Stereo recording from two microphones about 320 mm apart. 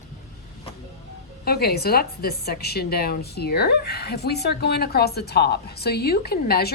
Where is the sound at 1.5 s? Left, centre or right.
Left.